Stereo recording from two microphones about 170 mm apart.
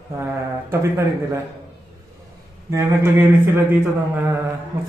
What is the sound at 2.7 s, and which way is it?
A man's voice, 15° right (ahead or behind).